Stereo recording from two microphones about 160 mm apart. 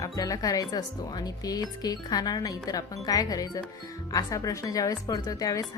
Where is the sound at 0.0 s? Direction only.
20° left (ahead or behind).